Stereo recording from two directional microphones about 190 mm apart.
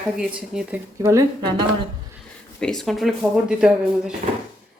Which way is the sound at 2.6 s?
5° left (ahead or behind).